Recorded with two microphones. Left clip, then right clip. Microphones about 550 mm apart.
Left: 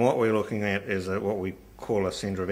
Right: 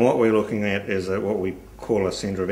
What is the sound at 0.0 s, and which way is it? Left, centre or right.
Speech, left.